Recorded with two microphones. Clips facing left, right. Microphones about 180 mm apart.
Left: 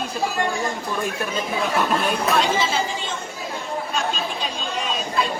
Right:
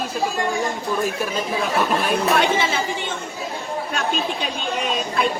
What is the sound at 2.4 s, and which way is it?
Speech, 60° right (ahead or behind).